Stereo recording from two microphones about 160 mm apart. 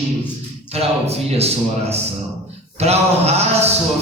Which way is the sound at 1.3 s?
40° right (ahead or behind).